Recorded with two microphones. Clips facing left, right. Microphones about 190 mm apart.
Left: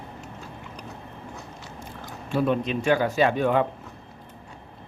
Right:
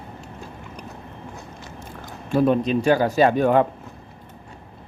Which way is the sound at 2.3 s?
40° right (ahead or behind).